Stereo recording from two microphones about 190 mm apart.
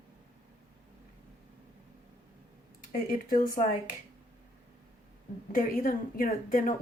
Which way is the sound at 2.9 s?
45° left (ahead or behind).